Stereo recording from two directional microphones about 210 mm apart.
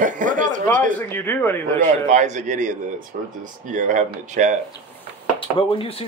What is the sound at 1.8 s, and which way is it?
Speech, 35° right (ahead or behind).